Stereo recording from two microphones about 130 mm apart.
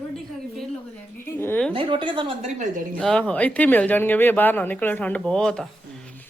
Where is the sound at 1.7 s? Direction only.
40° right (ahead or behind).